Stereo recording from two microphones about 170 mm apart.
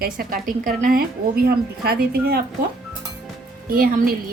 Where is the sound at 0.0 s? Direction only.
60° right (ahead or behind).